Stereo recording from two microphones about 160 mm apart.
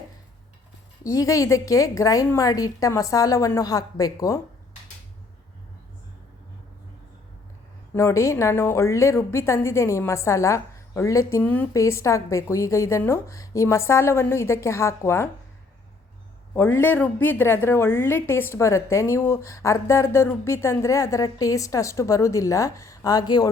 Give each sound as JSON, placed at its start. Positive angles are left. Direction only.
{"t": 1.0, "sound": "a woman's voice", "side_deg": 20}
{"t": 7.9, "sound": "a woman's voice", "side_deg": 20}
{"t": 16.6, "sound": "a woman's voice", "side_deg": 15}